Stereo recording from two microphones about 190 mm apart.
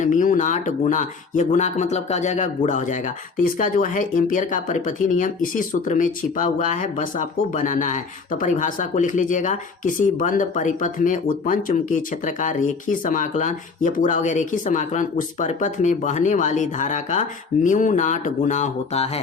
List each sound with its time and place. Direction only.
0.0 s speech: 45° left (ahead or behind)